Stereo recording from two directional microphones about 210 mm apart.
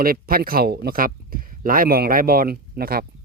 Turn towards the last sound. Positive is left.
turn(degrees=-45)  # may be behind; listen again after turning